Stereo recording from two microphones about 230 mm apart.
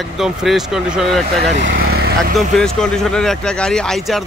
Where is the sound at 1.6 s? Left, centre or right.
Right.